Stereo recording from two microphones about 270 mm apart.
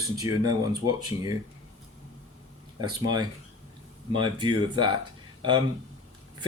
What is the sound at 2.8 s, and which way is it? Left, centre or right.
Speech, centre.